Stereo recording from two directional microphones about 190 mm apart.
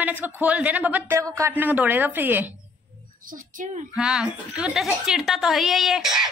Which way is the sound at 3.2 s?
45° right (ahead or behind).